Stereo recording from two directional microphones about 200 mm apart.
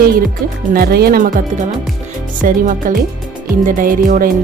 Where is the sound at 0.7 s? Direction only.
50° right (ahead or behind).